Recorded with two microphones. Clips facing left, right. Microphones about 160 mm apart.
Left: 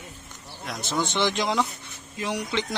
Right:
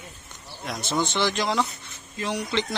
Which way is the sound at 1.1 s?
20° left (ahead or behind).